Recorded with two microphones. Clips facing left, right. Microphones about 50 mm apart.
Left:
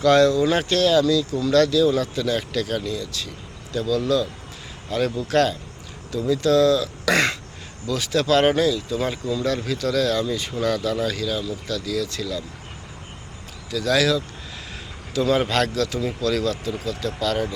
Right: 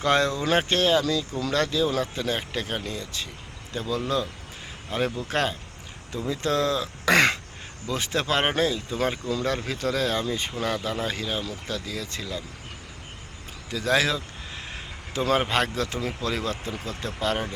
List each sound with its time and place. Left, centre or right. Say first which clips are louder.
0.0 s speech: left 7 dB; right
13.7 s speech: left 3 dB; right